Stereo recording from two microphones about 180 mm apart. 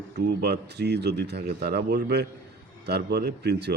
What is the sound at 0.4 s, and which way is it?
A man's voice, 65° right (ahead or behind).